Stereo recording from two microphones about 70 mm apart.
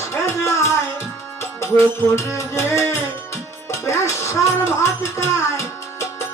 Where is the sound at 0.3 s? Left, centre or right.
Left.